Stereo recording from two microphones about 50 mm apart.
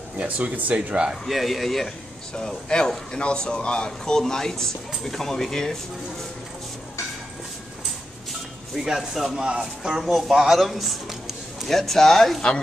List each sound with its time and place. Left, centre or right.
0.2 s speech: right
1.2 s speech: centre
2.3 s speech: centre
8.7 s speech: centre